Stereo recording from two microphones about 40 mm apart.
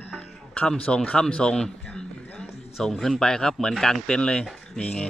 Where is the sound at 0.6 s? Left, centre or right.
Left.